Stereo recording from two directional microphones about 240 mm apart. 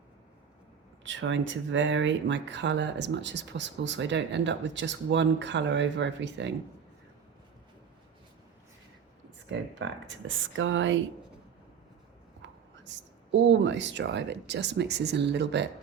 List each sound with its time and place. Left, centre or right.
1.0 s speech: right
9.5 s speech: right
12.4 s a sound: right
13.3 s speech: right